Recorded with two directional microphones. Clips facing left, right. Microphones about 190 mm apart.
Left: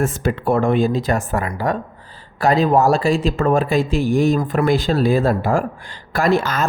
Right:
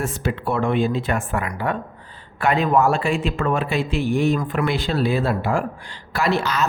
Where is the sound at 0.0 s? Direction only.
50° left (ahead or behind).